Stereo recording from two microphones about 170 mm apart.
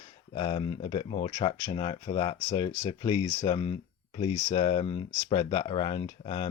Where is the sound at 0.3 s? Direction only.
30° left (ahead or behind).